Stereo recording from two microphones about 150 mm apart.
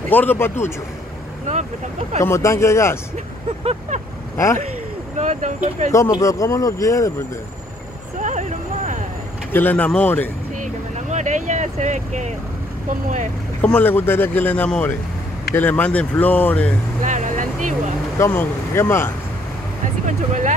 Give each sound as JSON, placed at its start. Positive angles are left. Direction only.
{"t": 0.1, "sound": "speech", "side_deg": 10}
{"t": 2.2, "sound": "speech", "side_deg": 20}
{"t": 5.1, "sound": "speech", "side_deg": -50}
{"t": 5.9, "sound": "speech", "side_deg": 20}
{"t": 8.2, "sound": "a sound", "side_deg": -55}
{"t": 9.5, "sound": "speech", "side_deg": 10}
{"t": 10.6, "sound": "vehicle", "side_deg": -55}
{"t": 13.6, "sound": "speech", "side_deg": 10}
{"t": 17.0, "sound": "vehicle", "side_deg": -55}
{"t": 18.2, "sound": "speech", "side_deg": 15}
{"t": 19.8, "sound": "vehicle", "side_deg": -55}